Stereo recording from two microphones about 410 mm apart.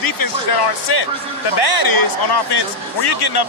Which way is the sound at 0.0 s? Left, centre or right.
Left.